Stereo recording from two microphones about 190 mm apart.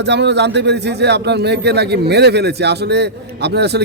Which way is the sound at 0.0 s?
65° right (ahead or behind).